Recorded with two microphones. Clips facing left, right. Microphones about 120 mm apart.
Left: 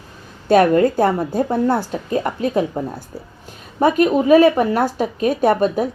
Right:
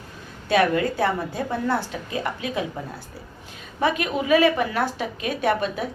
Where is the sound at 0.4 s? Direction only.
45° left (ahead or behind).